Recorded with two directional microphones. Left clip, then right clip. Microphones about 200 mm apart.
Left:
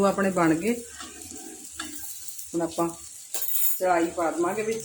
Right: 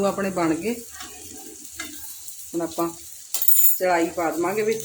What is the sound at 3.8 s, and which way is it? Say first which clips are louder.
Cutlery: right 2 dB; 25° right (ahead or behind).